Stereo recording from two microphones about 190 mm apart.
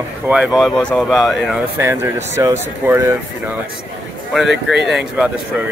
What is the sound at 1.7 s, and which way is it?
Speech, 15° right (ahead or behind).